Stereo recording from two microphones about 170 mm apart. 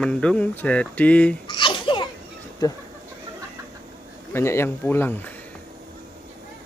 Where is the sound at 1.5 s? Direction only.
30° left (ahead or behind).